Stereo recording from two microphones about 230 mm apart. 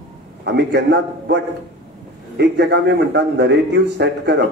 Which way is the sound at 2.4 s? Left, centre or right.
Right.